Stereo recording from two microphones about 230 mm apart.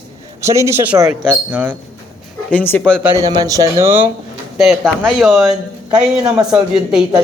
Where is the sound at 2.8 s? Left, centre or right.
Centre.